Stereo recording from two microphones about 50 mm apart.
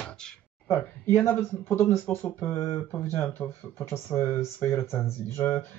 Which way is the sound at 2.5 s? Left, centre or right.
Left.